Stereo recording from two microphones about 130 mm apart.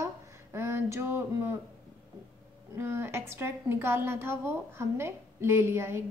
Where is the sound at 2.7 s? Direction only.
20° right (ahead or behind).